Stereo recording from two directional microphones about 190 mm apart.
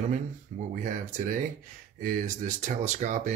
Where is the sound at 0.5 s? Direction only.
45° right (ahead or behind).